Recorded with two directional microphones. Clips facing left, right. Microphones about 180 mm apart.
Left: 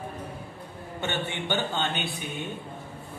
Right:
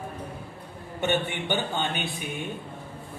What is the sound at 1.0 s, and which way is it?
Speech, 15° right (ahead or behind).